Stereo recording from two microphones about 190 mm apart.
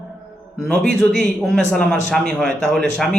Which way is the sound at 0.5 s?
5° left (ahead or behind).